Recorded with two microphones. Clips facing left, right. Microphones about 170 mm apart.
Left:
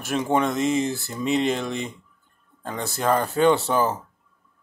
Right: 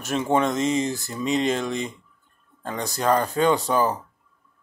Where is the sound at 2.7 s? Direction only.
15° right (ahead or behind).